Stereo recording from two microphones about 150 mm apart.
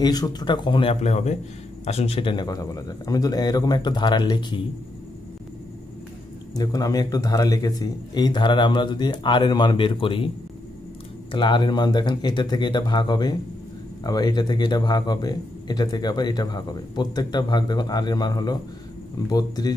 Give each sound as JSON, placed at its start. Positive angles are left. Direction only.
{"t": 0.0, "sound": "speech", "side_deg": 25}
{"t": 1.0, "sound": "speech", "side_deg": 50}
{"t": 6.5, "sound": "speech", "side_deg": 25}
{"t": 11.3, "sound": "speech", "side_deg": 30}